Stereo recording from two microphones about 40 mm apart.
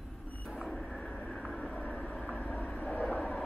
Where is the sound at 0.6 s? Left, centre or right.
Centre.